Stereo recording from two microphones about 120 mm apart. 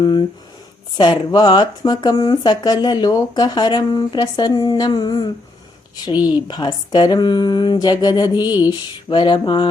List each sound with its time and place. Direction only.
0.0 s speech: 40° left (ahead or behind)